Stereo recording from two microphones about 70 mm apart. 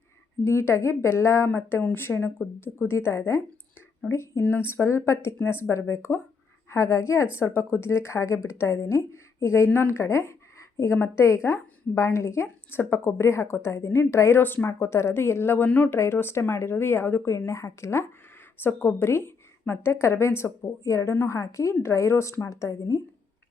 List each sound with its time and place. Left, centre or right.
0.4 s a woman's voice: left
1.5 s a woman's voice: left
14.7 s a woman's voice: left
16.0 s a woman's voice: left
17.2 s a woman's voice: left